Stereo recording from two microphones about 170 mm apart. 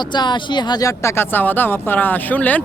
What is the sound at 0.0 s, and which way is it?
Speech, 25° left (ahead or behind).